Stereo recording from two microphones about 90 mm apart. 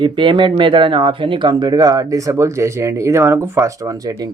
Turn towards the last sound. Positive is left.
turn(degrees=-40)  # may be behind; listen again after turning